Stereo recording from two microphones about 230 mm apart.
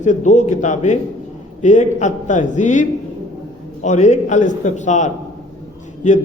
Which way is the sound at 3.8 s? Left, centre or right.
Left.